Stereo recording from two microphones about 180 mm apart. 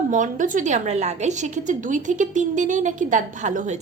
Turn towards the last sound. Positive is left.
turn(degrees=-40)  # may be behind; listen again after turning